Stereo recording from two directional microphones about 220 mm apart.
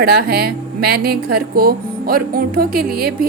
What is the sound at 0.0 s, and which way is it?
A woman's voice, 45° right (ahead or behind).